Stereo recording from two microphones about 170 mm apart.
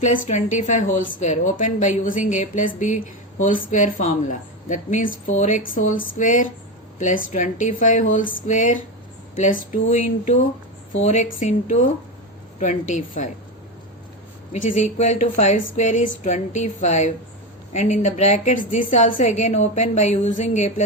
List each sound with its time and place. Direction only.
0.0 s a woman's voice: 45° left (ahead or behind)
12.5 s a woman's voice: 45° left (ahead or behind)
14.5 s a woman's voice: 45° left (ahead or behind)